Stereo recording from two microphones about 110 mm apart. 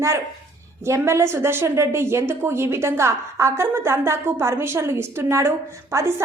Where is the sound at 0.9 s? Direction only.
25° right (ahead or behind).